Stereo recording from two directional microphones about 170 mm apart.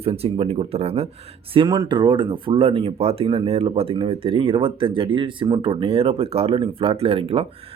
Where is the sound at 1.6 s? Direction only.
20° right (ahead or behind).